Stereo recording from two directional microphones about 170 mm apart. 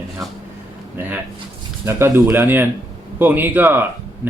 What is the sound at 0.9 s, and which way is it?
Speech, 10° right (ahead or behind).